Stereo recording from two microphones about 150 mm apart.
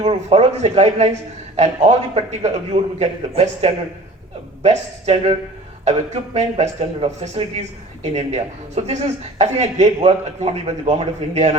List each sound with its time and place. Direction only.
0.0 s speech: 45° right (ahead or behind)